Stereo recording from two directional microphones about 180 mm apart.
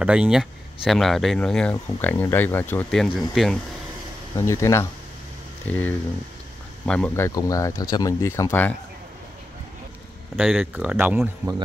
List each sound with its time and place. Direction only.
0.0 s speech: 5° right (ahead or behind)
4.4 s speech: 15° left (ahead or behind)
7.2 s speech: 20° left (ahead or behind)
10.3 s speech: centre (ahead or behind)